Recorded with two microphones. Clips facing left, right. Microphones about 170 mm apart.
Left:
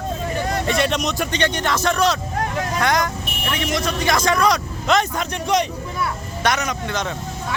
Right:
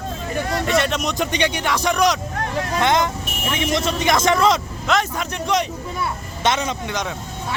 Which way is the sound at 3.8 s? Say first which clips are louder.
Right 1 dB; 25° right (ahead or behind).